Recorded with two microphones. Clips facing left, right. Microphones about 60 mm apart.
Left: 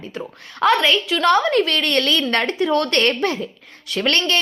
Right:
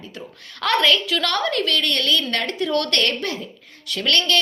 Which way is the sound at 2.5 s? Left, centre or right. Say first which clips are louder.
Left 3 dB; left.